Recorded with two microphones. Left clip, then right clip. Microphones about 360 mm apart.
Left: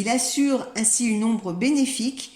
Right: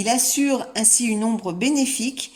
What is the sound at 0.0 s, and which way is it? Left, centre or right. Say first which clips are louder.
Speech: right 2 dB; centre.